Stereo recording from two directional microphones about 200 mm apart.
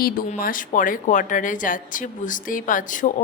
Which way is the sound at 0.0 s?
45° left (ahead or behind).